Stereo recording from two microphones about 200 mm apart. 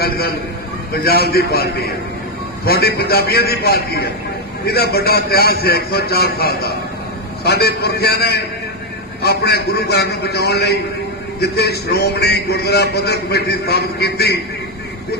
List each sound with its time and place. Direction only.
1.0 s a man's voice: 50° left (ahead or behind)